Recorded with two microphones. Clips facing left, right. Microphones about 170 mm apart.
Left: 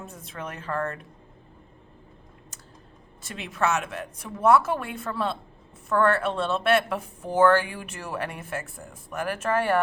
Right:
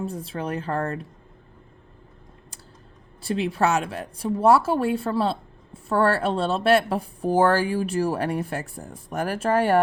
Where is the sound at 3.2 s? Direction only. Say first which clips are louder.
Right 5 dB; 30° right (ahead or behind).